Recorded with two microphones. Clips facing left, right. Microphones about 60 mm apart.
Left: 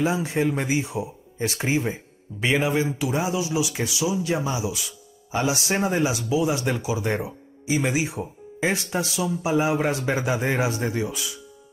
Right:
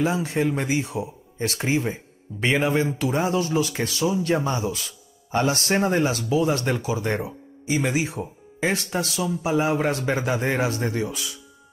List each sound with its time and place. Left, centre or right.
0.0 s speech: centre
2.4 s speech: centre